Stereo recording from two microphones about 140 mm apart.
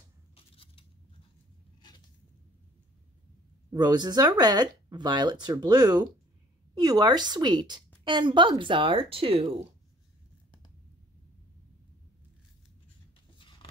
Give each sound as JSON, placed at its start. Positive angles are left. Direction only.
{"t": 0.4, "sound": "scissors", "side_deg": 40}
{"t": 3.7, "sound": "speech", "side_deg": -30}